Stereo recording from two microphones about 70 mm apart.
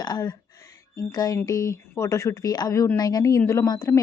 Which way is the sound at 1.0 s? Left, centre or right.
Left.